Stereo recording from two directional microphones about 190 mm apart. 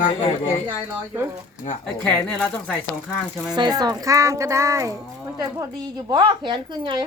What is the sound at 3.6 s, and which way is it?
A woman's voice, 20° right (ahead or behind).